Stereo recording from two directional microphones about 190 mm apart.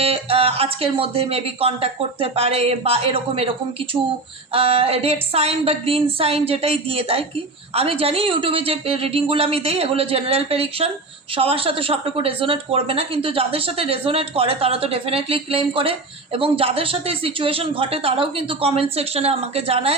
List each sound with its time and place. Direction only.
0.0 s speech: 30° right (ahead or behind)
4.5 s a woman's voice: 30° right (ahead or behind)